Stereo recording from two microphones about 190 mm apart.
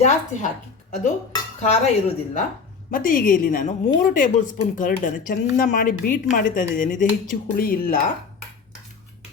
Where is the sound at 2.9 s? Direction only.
45° left (ahead or behind).